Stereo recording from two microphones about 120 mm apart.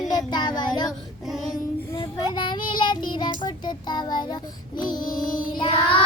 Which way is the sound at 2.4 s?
40° left (ahead or behind).